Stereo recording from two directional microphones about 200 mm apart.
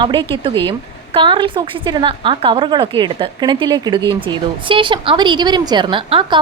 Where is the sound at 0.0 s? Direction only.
25° right (ahead or behind).